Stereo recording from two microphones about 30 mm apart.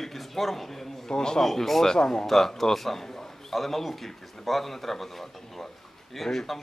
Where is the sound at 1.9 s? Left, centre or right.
Left.